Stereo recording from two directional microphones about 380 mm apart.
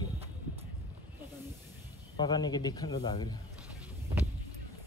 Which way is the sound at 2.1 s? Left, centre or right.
Centre.